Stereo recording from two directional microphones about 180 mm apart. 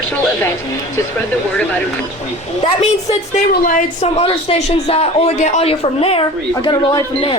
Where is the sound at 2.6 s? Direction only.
35° left (ahead or behind).